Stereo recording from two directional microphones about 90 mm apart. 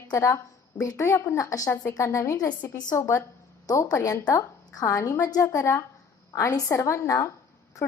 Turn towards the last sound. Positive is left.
turn(degrees=35)  # may be behind; listen again after turning